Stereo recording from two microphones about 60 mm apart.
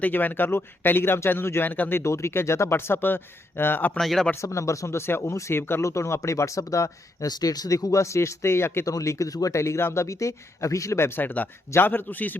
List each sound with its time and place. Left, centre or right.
0.0 s speech: left
1.6 s speech: left
2.0 s speech: left
3.9 s speech: centre
4.4 s speech: left
5.8 s speech: left
8.9 s speech: left
11.2 s speech: left